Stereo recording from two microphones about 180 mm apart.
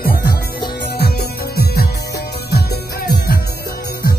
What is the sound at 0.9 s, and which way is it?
Music, 60° left (ahead or behind).